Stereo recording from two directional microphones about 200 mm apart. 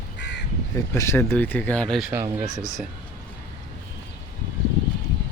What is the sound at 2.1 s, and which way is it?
Speech, 10° right (ahead or behind).